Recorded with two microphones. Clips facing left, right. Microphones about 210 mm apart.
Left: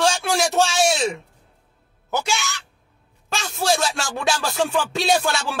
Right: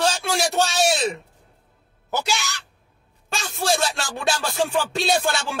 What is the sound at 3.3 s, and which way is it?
Music, centre (ahead or behind).